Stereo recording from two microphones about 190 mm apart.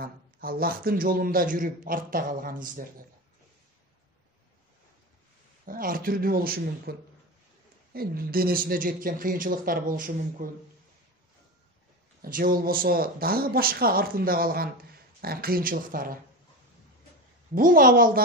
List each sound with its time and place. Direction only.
0.0 s speech: 50° right (ahead or behind)
5.7 s speech: 45° right (ahead or behind)
12.2 s speech: 50° right (ahead or behind)
17.6 s speech: 45° right (ahead or behind)